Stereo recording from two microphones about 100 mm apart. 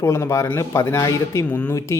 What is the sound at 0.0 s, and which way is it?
A man's voice, 30° left (ahead or behind).